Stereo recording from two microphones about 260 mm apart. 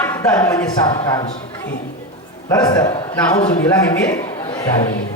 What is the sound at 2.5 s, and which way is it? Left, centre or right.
A man's voice, centre.